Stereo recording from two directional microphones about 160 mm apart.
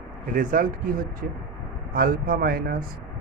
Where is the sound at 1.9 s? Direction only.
65° right (ahead or behind).